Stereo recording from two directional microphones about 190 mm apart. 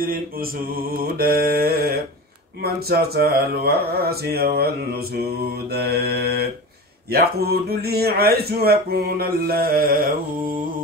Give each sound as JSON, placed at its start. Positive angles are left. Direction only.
{"t": 0.0, "sound": "mantra", "side_deg": -50}
{"t": 2.6, "sound": "speech", "side_deg": -55}